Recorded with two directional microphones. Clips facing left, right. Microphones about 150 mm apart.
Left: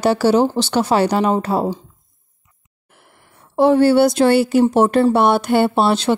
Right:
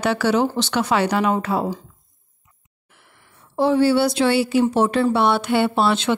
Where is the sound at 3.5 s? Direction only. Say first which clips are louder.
Left 4 dB; 55° left (ahead or behind).